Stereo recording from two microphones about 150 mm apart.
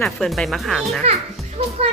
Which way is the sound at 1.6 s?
40° right (ahead or behind).